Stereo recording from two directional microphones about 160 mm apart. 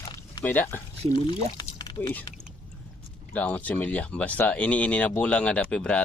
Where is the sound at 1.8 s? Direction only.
25° left (ahead or behind).